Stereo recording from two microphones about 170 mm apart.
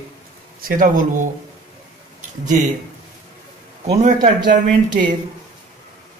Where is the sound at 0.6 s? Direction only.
55° right (ahead or behind).